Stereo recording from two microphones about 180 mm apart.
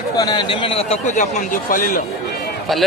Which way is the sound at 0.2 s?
25° left (ahead or behind).